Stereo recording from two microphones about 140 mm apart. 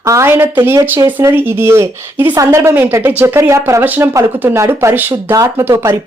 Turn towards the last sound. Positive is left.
turn(degrees=-20)  # may be behind; listen again after turning